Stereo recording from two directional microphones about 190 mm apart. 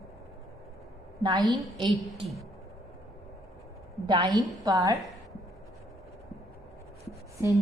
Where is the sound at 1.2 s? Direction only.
20° right (ahead or behind).